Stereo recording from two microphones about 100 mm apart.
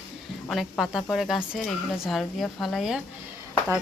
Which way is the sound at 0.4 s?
Centre (ahead or behind).